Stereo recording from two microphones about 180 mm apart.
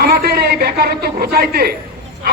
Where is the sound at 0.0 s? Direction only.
60° right (ahead or behind).